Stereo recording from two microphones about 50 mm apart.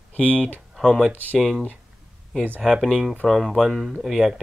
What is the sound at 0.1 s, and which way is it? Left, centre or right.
Speech, left.